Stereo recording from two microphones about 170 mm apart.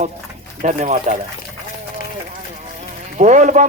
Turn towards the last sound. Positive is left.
turn(degrees=-45)  # may be behind; listen again after turning